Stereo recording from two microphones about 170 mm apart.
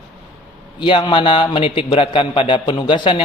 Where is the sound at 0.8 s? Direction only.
30° left (ahead or behind).